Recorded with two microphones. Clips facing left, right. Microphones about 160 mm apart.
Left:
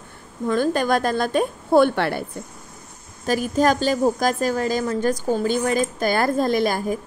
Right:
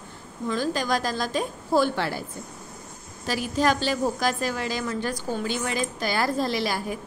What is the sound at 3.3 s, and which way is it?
A woman's voice, 45° left (ahead or behind).